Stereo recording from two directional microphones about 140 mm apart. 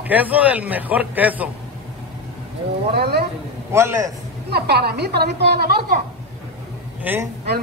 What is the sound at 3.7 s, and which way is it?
Speech, 20° right (ahead or behind).